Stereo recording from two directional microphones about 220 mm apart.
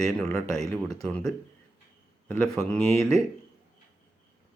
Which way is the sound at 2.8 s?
30° right (ahead or behind).